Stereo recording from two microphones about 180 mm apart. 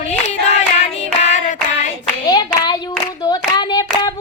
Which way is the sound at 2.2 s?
25° left (ahead or behind).